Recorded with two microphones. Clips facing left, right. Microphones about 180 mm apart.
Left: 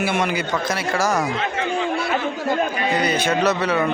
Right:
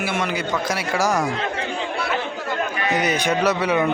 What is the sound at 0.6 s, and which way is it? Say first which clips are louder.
Speech: even; 10° right (ahead or behind).